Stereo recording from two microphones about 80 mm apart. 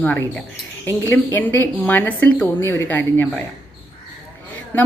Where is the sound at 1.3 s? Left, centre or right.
Left.